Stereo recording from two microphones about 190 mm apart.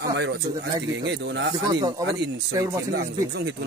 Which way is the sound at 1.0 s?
70° right (ahead or behind).